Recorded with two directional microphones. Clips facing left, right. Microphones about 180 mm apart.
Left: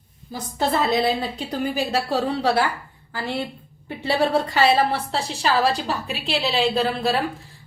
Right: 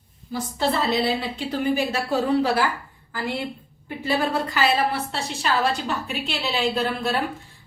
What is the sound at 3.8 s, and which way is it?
A woman's voice, 30° left (ahead or behind).